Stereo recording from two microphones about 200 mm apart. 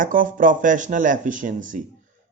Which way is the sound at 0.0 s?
40° right (ahead or behind).